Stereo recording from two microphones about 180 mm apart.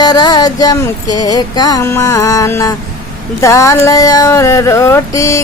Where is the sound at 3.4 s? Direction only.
15° left (ahead or behind).